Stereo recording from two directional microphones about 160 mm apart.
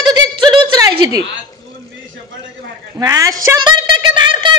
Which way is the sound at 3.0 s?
20° right (ahead or behind).